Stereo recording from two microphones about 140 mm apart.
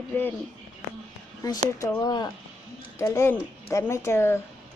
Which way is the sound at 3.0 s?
20° left (ahead or behind).